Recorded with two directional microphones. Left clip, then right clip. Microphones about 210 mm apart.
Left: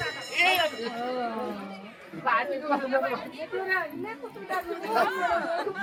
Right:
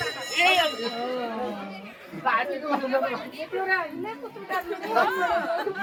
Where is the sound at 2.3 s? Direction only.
10° right (ahead or behind).